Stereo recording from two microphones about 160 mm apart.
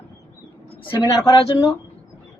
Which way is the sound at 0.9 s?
25° left (ahead or behind).